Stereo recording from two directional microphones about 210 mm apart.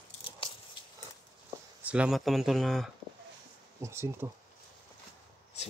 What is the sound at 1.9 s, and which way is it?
Speech, 5° right (ahead or behind).